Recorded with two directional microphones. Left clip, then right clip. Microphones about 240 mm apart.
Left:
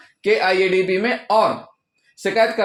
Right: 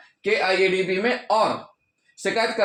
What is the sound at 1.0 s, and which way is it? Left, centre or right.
Speech, left.